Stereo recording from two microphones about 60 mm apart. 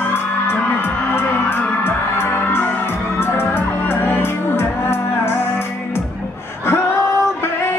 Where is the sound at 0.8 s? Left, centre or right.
Left.